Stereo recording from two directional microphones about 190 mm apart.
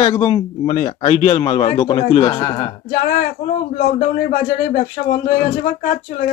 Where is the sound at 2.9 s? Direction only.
50° left (ahead or behind).